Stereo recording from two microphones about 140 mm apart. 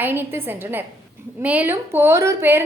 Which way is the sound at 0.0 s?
15° right (ahead or behind).